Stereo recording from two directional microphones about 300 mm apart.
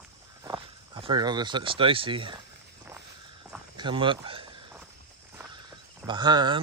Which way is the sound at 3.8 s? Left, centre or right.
Centre.